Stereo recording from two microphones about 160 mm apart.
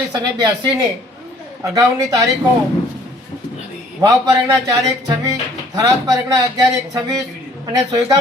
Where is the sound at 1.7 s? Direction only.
20° right (ahead or behind).